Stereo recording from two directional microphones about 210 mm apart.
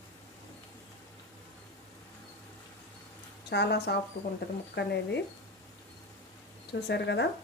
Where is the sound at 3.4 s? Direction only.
50° left (ahead or behind).